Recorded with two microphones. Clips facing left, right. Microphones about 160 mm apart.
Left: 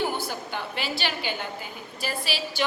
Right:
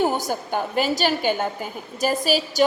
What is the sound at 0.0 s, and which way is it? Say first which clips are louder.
A woman's voice: right 6 dB; 45° right (ahead or behind).